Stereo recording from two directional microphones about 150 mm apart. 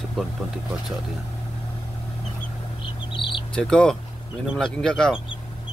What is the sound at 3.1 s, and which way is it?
Bird, 35° left (ahead or behind).